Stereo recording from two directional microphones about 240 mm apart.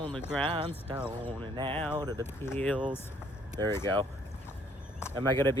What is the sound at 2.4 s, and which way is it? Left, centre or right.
Speech, centre.